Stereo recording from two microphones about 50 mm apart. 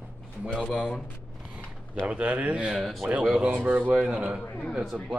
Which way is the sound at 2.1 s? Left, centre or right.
Right.